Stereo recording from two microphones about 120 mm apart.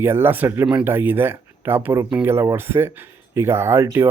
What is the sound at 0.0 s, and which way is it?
Speech, 20° right (ahead or behind).